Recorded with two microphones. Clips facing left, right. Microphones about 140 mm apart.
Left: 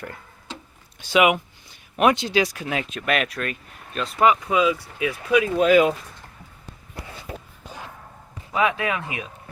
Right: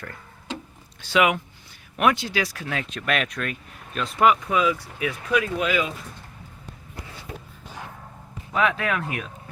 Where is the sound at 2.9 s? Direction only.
5° left (ahead or behind).